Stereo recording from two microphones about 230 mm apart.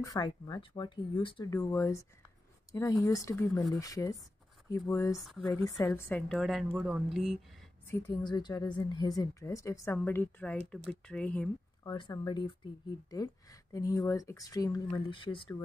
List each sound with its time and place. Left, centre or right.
0.0 s speech: centre
5.1 s a woman's voice: centre
5.4 s a woman's voice: centre
7.9 s a woman's voice: centre
11.8 s speech: centre